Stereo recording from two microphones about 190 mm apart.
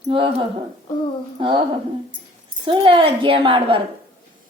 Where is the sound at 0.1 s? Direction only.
25° right (ahead or behind).